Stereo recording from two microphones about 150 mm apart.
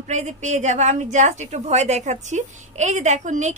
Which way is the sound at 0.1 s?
50° right (ahead or behind).